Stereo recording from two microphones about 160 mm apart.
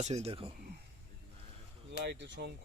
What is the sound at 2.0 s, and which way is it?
Speech, 90° right.